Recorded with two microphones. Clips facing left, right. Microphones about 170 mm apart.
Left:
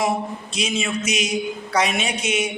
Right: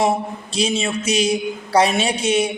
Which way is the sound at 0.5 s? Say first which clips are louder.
Right 4 dB; 30° right (ahead or behind).